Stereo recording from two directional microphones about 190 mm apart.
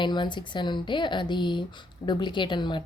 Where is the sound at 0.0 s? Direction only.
25° left (ahead or behind).